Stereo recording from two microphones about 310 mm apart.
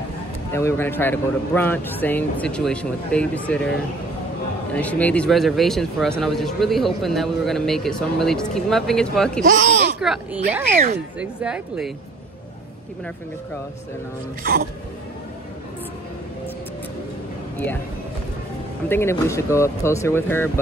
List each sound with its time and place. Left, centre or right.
0.5 s speech: centre
4.7 s speech: centre
9.4 s speech: right
9.9 s speech: centre
14.4 s music: right
18.9 s speech: centre